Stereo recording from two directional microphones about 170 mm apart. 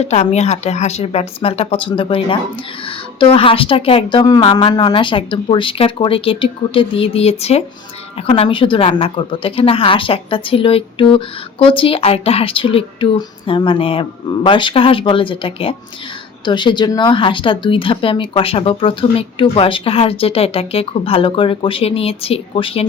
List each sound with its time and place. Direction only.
0.0 s speech: 40° left (ahead or behind)